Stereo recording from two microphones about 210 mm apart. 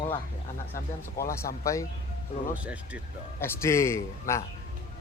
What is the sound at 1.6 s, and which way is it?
Speech, 15° left (ahead or behind).